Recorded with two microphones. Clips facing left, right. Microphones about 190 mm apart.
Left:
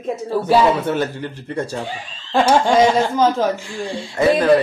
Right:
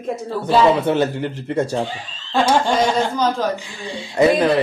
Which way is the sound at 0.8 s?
20° right (ahead or behind).